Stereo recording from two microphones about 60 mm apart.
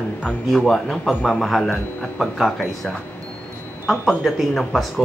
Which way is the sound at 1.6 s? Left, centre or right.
Centre.